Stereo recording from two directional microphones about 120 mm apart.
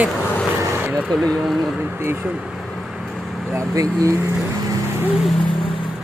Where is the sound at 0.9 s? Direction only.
Centre (ahead or behind).